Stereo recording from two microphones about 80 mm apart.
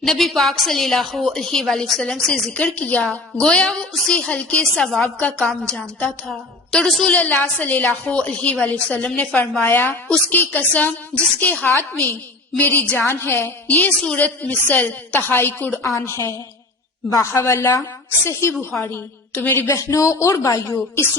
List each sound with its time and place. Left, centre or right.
0.0 s a woman's voice: centre
2.5 s a woman's voice: centre
7.1 s a woman's voice: centre
13.1 s a woman's voice: left
15.8 s a woman's voice: left
19.6 s speech: left